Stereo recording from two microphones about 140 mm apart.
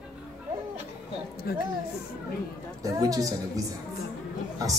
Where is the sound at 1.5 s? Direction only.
90° left.